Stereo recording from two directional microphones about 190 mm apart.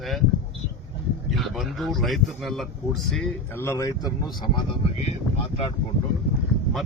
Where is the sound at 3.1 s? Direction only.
10° left (ahead or behind).